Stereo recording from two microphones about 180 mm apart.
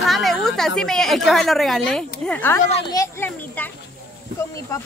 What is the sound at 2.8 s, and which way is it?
Children playing, 15° left (ahead or behind).